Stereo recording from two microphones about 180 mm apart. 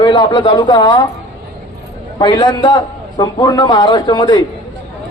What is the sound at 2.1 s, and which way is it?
A man's voice, 25° left (ahead or behind).